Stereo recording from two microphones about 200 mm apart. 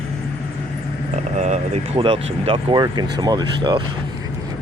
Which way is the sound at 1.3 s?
35° right (ahead or behind).